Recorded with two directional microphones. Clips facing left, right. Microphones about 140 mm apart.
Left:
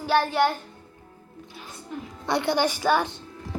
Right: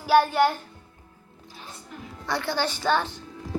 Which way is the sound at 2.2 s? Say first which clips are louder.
Left 4 dB; 20° left (ahead or behind).